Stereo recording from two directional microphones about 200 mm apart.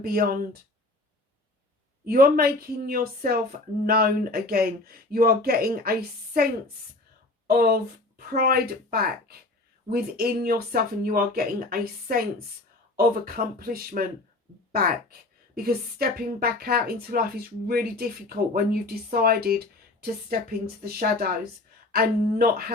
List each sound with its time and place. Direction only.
0.0 s speech: 45° right (ahead or behind)
2.0 s speech: 45° right (ahead or behind)
15.5 s speech: 50° right (ahead or behind)